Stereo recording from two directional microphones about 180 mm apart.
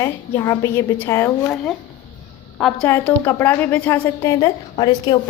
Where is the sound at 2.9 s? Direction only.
15° left (ahead or behind).